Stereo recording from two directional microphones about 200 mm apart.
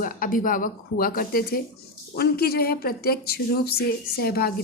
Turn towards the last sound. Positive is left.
turn(degrees=50)  # may be behind; listen again after turning